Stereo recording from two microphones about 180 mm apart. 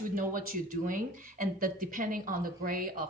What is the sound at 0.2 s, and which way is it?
A woman's voice, 50° right (ahead or behind).